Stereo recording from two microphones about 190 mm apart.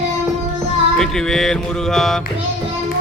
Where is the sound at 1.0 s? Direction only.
Centre (ahead or behind).